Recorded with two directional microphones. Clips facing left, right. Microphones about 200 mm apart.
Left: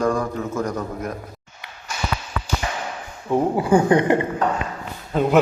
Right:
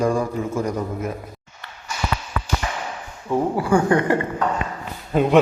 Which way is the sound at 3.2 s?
20° left (ahead or behind).